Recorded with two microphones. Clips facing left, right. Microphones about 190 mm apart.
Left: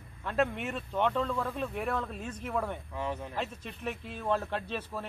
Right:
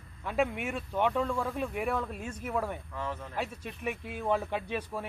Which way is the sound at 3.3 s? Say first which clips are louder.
Right 1 dB; 10° right (ahead or behind).